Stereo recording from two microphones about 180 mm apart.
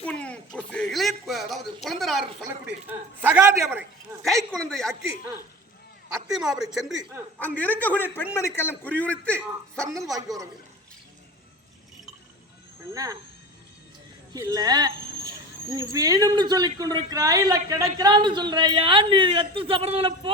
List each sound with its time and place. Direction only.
0.0 s a sound: 5° left (ahead or behind)
3.2 s a man's voice: 10° right (ahead or behind)
4.5 s speech: centre (ahead or behind)
6.3 s speech: 5° right (ahead or behind)
7.3 s a man's voice: 10° left (ahead or behind)
10.2 s a man's voice: 20° right (ahead or behind)
12.9 s a man's voice: 20° right (ahead or behind)
14.3 s a man's voice: 20° right (ahead or behind)